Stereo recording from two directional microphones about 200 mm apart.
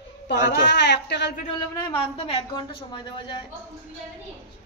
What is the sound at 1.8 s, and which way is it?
Speech, 25° left (ahead or behind).